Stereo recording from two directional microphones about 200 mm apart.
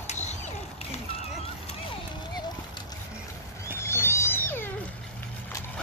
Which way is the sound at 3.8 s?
10° left (ahead or behind).